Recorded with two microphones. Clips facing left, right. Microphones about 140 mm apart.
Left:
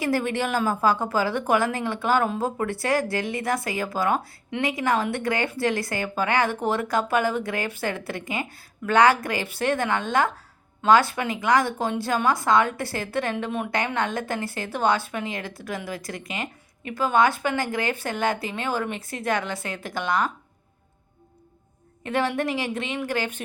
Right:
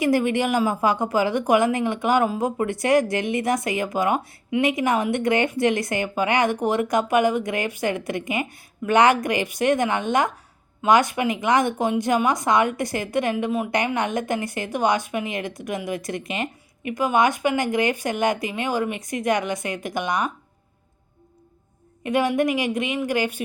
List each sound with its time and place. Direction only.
0.0 s speech: 15° right (ahead or behind)
13.7 s speech: 15° right (ahead or behind)
22.0 s speech: 15° right (ahead or behind)